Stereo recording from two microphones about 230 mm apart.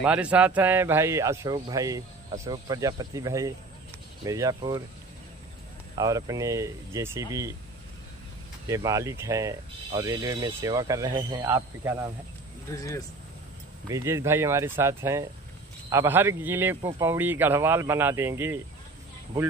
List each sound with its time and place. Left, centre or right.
0.0 s speech: centre
6.0 s speech: centre
8.6 s speech: centre
12.7 s speech: centre
13.9 s speech: centre